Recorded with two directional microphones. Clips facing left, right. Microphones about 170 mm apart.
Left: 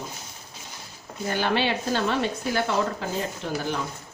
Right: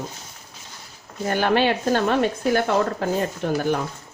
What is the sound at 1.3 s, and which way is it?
Speech, 50° right (ahead or behind).